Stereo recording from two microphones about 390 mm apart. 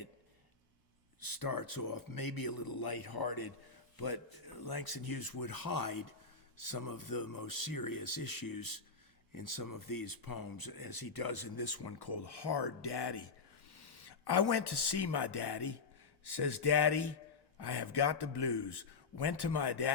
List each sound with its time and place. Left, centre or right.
1.2 s a man's voice: left